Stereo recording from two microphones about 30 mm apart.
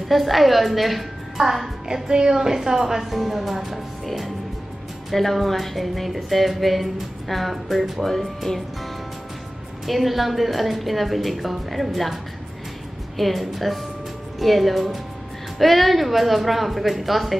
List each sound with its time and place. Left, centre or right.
0.1 s a woman's voice: centre
2.0 s a woman's voice: right
3.1 s a woman's voice: centre
5.1 s a woman's voice: centre
8.0 s speech: centre
9.8 s a woman's voice: centre
13.2 s a woman's voice: centre